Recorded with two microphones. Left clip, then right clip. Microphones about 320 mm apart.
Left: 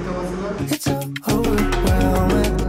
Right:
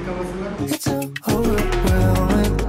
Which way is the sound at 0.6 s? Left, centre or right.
Centre.